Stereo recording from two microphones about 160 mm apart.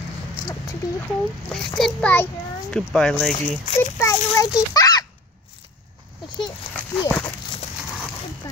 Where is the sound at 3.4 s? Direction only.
45° left (ahead or behind).